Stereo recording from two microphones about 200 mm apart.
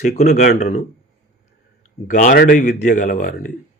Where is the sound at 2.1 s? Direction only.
40° left (ahead or behind).